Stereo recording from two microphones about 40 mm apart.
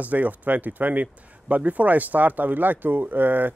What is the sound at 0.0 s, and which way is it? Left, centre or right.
A man's voice, right.